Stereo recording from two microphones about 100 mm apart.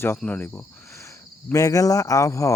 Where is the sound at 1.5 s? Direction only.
35° left (ahead or behind).